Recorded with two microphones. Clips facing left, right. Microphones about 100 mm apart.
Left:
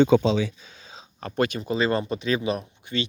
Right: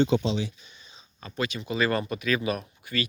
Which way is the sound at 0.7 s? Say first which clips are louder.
Left 8 dB; 90° left.